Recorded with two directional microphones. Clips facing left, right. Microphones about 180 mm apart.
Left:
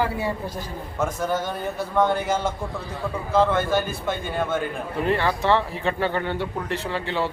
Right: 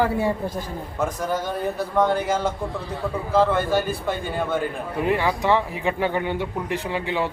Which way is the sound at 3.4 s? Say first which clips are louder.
Even; 10° right (ahead or behind).